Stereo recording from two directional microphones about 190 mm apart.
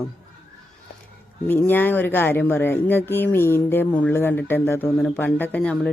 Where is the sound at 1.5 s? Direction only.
10° left (ahead or behind).